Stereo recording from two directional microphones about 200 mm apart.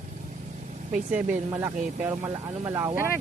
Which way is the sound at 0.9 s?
5° right (ahead or behind).